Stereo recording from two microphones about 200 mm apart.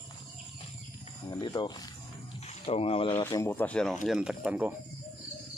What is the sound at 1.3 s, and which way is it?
Speech, 20° left (ahead or behind).